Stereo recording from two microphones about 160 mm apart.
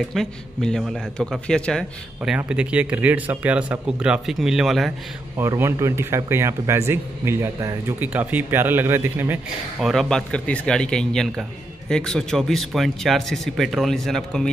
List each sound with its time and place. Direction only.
0.1 s speech: 5° left (ahead or behind)
2.3 s a man's voice: 10° right (ahead or behind)
5.4 s a man's voice: 15° right (ahead or behind)
9.8 s speech: centre (ahead or behind)